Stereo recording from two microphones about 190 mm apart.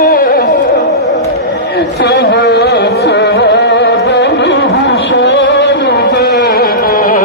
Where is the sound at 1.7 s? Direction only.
60° left (ahead or behind).